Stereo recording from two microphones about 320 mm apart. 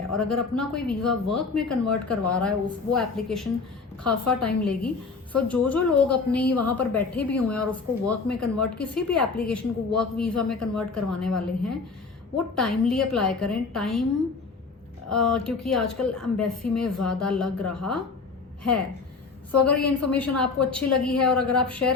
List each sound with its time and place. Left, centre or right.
0.1 s a woman's voice: centre
15.1 s a woman's voice: centre
19.5 s a woman's voice: centre